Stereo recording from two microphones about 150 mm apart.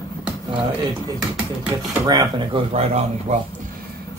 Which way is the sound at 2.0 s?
30° right (ahead or behind).